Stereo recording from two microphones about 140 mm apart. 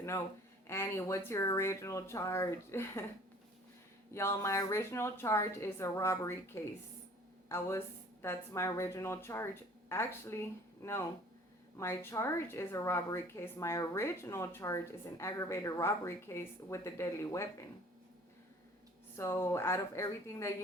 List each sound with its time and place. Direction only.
0.7 s a woman's voice: 20° left (ahead or behind)
4.1 s a woman's voice: 20° left (ahead or behind)
19.1 s a woman's voice: 20° left (ahead or behind)